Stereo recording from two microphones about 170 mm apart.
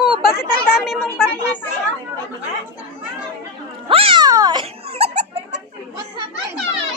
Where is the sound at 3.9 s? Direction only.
30° right (ahead or behind).